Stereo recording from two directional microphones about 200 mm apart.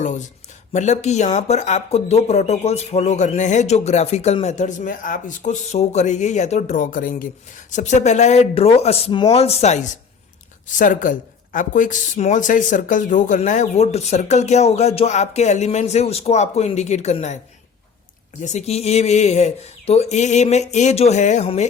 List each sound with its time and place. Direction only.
0.0 s a sound: 35° left (ahead or behind)
0.7 s speech: 35° left (ahead or behind)
18.4 s speech: 35° left (ahead or behind)